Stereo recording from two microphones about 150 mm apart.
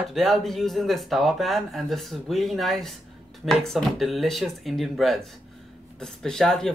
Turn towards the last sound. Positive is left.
turn(degrees=5)  # may be behind; listen again after turning